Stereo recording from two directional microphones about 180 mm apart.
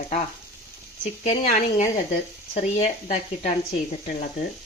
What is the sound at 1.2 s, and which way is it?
Speech, 40° left (ahead or behind).